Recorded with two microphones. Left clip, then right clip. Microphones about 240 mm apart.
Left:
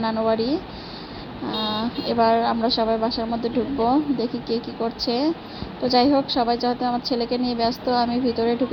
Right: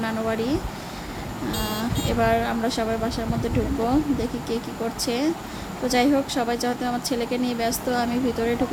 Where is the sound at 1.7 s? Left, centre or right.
Centre.